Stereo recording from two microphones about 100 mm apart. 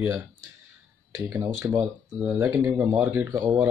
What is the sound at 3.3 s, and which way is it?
Speech, 30° right (ahead or behind).